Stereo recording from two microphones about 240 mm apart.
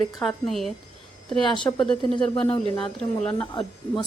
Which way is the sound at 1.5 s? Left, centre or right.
Centre.